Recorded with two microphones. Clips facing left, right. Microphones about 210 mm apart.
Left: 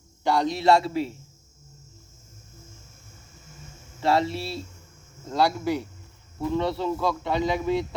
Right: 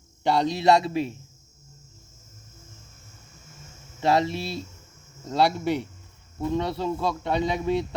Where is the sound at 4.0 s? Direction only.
20° right (ahead or behind).